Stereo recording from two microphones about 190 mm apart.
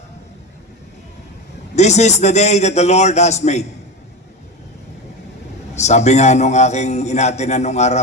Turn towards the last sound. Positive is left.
turn(degrees=35)  # may be behind; listen again after turning